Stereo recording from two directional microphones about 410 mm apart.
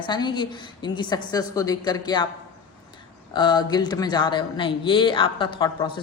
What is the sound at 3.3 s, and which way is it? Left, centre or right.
Speech, centre.